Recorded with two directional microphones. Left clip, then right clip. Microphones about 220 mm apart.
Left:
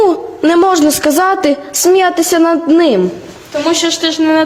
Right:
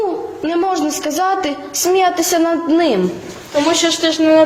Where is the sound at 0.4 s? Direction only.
55° left (ahead or behind).